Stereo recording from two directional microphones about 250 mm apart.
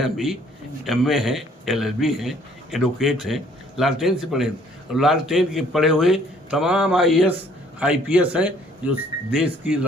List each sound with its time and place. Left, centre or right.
0.0 s a man's voice: centre